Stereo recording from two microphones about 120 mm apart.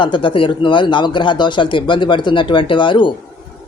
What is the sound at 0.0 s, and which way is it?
Speech, 45° left (ahead or behind).